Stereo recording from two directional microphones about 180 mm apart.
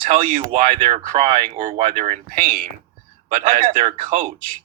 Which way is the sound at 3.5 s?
30° right (ahead or behind).